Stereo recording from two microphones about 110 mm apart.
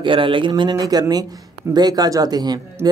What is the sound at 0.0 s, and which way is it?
A man's voice, 50° right (ahead or behind).